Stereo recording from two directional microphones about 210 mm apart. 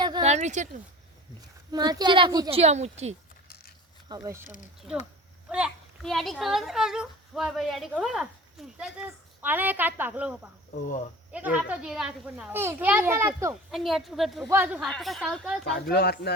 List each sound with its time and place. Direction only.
0.0 s a sound: 20° right (ahead or behind)
0.3 s speech: 35° right (ahead or behind)
1.7 s a woman's voice: 20° right (ahead or behind)
4.1 s a child's voice: 15° right (ahead or behind)
5.5 s a child's voice: 5° right (ahead or behind)
15.9 s speech: 50° left (ahead or behind)